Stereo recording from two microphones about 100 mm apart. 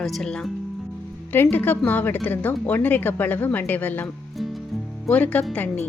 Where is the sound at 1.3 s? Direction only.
20° left (ahead or behind).